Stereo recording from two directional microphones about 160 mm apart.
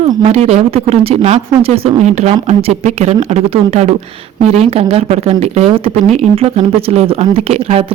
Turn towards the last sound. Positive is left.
turn(degrees=-40)  # may be behind; listen again after turning